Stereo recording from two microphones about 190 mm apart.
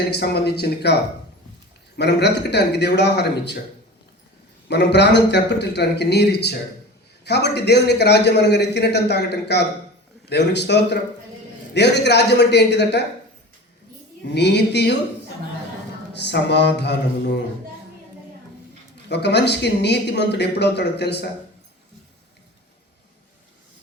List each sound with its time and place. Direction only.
0.1 s a man's voice: 60° left (ahead or behind)
2.0 s a man's voice: 60° left (ahead or behind)
4.7 s a man's voice: 65° left (ahead or behind)
14.3 s a man's voice: 60° left (ahead or behind)
16.1 s a man's voice: 60° left (ahead or behind)
19.0 s a man's voice: 60° left (ahead or behind)